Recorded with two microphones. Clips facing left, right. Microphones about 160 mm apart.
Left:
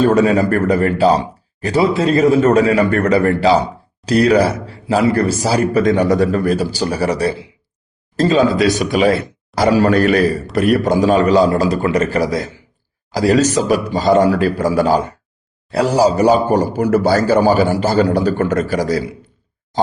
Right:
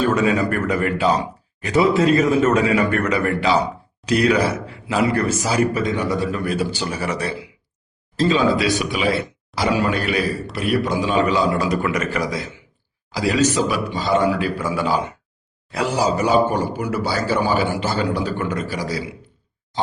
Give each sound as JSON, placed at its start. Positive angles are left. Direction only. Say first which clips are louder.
{"t": 0.0, "sound": "speech", "louder": "left 6 dB", "side_deg": 35}
{"t": 8.1, "sound": "speech", "louder": "left 4 dB", "side_deg": 45}